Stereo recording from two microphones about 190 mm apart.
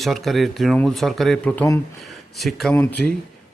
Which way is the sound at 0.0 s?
Centre (ahead or behind).